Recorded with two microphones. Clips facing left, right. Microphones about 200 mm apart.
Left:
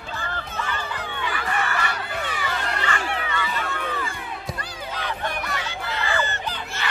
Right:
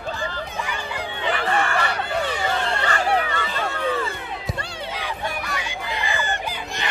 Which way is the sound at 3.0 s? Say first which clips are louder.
Right 6 dB; 40° right (ahead or behind).